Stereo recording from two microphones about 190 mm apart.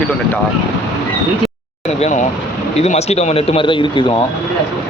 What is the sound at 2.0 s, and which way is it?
A man's voice, 40° left (ahead or behind).